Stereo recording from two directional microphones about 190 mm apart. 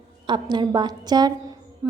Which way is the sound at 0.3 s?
25° right (ahead or behind).